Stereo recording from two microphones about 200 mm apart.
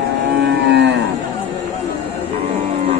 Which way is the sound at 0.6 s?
60° right (ahead or behind).